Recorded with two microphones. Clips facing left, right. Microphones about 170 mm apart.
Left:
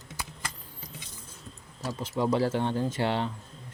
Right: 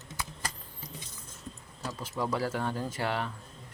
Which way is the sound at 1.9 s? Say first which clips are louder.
Left 5 dB; 20° left (ahead or behind).